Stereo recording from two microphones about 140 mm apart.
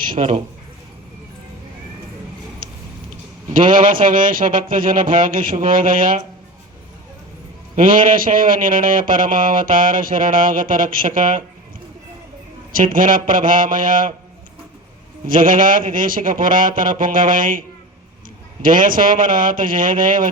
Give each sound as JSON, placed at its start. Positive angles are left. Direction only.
{"t": 0.0, "sound": "speech", "side_deg": -70}
{"t": 3.6, "sound": "speech", "side_deg": -75}
{"t": 7.8, "sound": "a man's voice", "side_deg": -80}
{"t": 12.7, "sound": "a man's voice", "side_deg": -80}
{"t": 15.3, "sound": "speech", "side_deg": -80}
{"t": 18.6, "sound": "a man's voice", "side_deg": -80}